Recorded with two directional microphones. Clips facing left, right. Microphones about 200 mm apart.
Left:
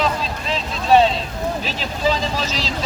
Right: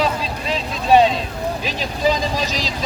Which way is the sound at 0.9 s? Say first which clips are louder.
Right 1 dB; 10° right (ahead or behind).